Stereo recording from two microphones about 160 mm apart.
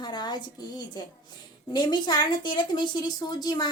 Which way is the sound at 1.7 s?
30° left (ahead or behind).